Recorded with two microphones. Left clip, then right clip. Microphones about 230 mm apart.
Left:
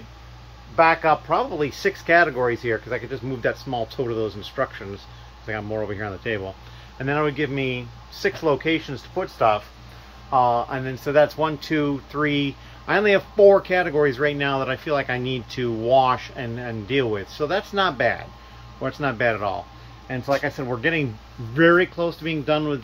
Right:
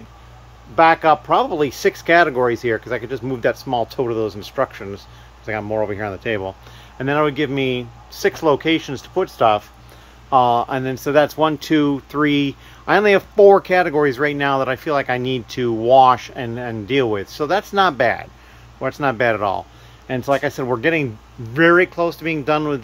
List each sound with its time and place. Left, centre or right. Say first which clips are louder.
0.7 s speech: right 4 dB; right